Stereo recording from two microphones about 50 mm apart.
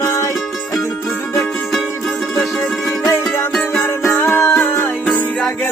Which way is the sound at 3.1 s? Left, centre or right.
Left.